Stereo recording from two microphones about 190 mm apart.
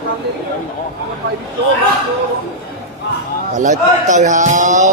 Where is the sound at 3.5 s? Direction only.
40° right (ahead or behind).